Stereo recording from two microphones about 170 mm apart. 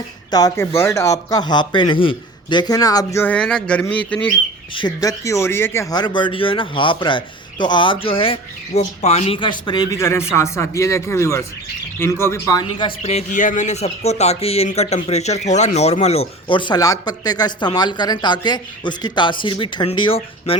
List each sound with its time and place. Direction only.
0.3 s speech: 20° left (ahead or behind)
4.7 s speech: 25° left (ahead or behind)
13.0 s speech: 40° left (ahead or behind)